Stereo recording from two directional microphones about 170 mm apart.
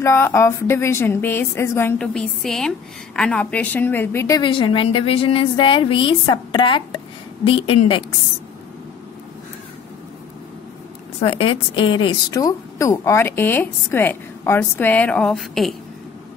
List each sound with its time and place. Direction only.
0.0 s a woman's voice: 15° left (ahead or behind)
4.4 s a woman's voice: 30° left (ahead or behind)
11.2 s a woman's voice: 35° left (ahead or behind); by 15.7 s centre (ahead or behind)